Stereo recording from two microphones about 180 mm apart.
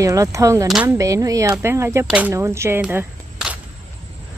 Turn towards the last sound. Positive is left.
turn(degrees=-5)  # may be behind; listen again after turning